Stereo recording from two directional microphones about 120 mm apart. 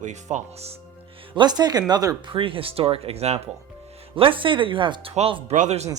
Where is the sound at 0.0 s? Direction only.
85° right; by 0.8 s 70° right (ahead or behind).